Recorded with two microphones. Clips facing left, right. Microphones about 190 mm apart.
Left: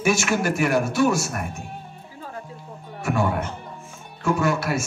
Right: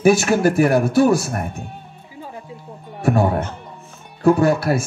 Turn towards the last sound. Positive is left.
turn(degrees=-35)  # may be behind; listen again after turning